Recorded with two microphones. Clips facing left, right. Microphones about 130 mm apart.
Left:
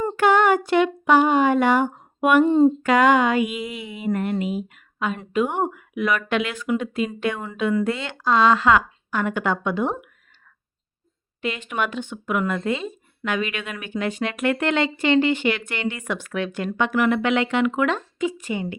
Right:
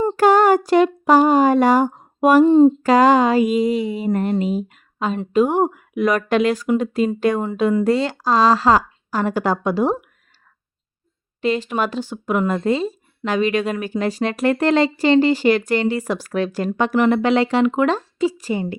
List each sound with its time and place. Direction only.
0.2 s speech: 40° right (ahead or behind)
2.5 s a sound: 15° right (ahead or behind)
2.8 s speech: 35° right (ahead or behind)
11.4 s speech: 35° right (ahead or behind)